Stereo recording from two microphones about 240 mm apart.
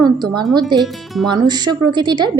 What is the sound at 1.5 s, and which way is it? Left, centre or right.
Speech, centre.